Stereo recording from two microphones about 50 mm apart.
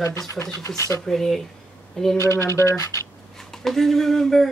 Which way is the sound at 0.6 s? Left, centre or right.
Left.